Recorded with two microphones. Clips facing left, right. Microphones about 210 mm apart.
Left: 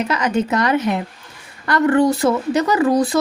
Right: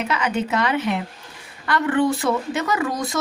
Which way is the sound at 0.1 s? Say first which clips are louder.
Left 4 dB; 40° left (ahead or behind).